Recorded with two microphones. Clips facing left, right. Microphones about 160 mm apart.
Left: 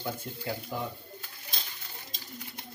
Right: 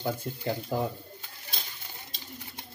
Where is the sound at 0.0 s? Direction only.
20° right (ahead or behind).